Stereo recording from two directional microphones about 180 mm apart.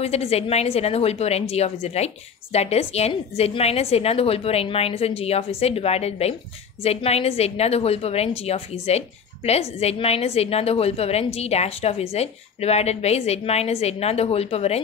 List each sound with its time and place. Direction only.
0.0 s a woman's voice: 35° left (ahead or behind)